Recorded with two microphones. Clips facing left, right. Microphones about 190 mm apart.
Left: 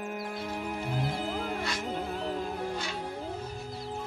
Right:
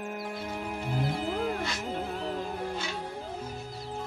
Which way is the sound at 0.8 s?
Centre (ahead or behind).